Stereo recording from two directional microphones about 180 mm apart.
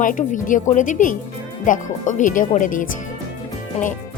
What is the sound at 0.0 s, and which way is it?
Speech, 45° left (ahead or behind).